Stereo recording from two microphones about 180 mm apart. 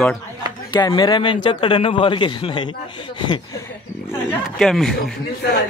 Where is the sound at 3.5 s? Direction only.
15° left (ahead or behind).